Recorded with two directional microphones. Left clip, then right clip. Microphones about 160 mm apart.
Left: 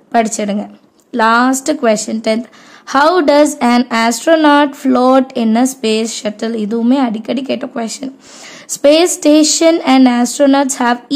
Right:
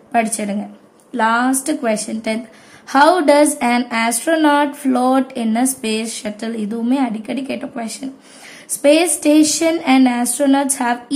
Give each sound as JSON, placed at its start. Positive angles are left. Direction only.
{"t": 0.1, "sound": "speech", "side_deg": 40}